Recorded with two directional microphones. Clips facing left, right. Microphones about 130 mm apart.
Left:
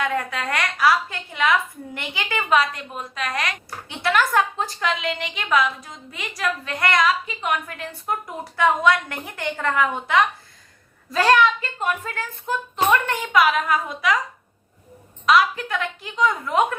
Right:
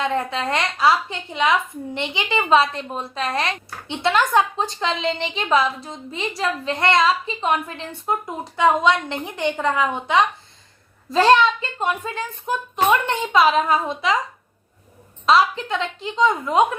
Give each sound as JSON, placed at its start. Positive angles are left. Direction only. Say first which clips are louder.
{"t": 0.0, "sound": "a woman's voice", "louder": "right 2 dB", "side_deg": -25}
{"t": 15.3, "sound": "a woman's voice", "louder": "right 1 dB", "side_deg": -25}